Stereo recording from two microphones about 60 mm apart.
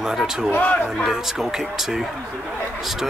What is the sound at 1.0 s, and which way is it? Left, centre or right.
Speech, centre.